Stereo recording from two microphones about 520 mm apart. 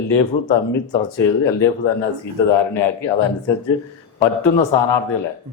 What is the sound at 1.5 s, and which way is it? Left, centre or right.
A man's voice, left.